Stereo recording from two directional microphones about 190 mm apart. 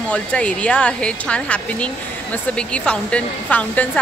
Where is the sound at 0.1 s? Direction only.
5° left (ahead or behind).